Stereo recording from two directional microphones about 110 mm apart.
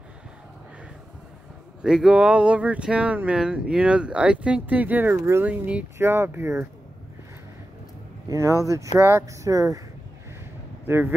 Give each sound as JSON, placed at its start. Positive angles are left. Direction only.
{"t": 1.8, "sound": "speech", "side_deg": -5}
{"t": 5.1, "sound": "speech", "side_deg": -30}
{"t": 5.4, "sound": "speech", "side_deg": -10}
{"t": 8.3, "sound": "speech", "side_deg": -30}
{"t": 10.9, "sound": "speech", "side_deg": -20}